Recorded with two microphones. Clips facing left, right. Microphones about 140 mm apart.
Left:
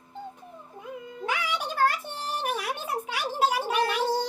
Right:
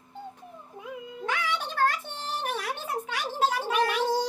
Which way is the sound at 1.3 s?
10° left (ahead or behind).